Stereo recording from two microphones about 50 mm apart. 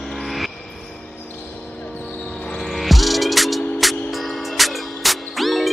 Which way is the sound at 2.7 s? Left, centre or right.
Centre.